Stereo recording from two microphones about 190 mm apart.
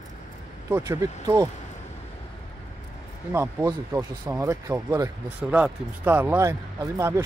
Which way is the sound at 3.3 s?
15° right (ahead or behind).